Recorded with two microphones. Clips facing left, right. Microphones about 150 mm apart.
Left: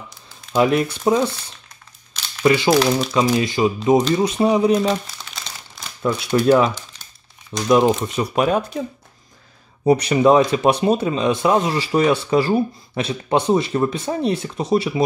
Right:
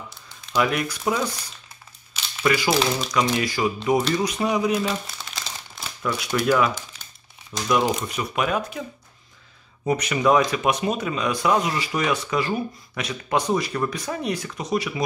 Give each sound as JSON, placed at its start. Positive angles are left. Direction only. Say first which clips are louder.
{"t": 0.6, "sound": "speech", "louder": "left 6 dB", "side_deg": 30}
{"t": 2.4, "sound": "speech", "louder": "left 6 dB", "side_deg": 25}
{"t": 2.7, "sound": "speech", "louder": "left 6 dB", "side_deg": 0}
{"t": 3.3, "sound": "speech", "louder": "left 5 dB", "side_deg": 25}
{"t": 4.8, "sound": "crumpling", "louder": "left 6 dB", "side_deg": 0}
{"t": 6.0, "sound": "speech", "louder": "left 6 dB", "side_deg": 30}
{"t": 9.8, "sound": "speech", "louder": "left 6 dB", "side_deg": 30}